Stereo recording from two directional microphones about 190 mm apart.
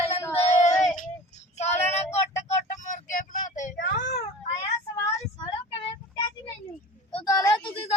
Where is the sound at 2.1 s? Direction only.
35° left (ahead or behind).